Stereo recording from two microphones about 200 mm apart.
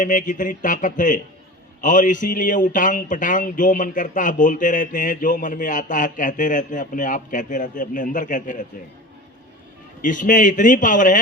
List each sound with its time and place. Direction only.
0.0 s speech: 40° left (ahead or behind)
10.0 s speech: 40° left (ahead or behind)